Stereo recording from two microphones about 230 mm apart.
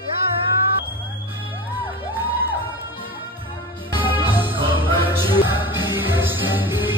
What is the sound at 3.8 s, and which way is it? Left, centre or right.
Music, left.